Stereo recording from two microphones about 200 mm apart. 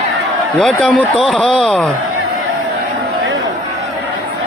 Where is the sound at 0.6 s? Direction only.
5° left (ahead or behind).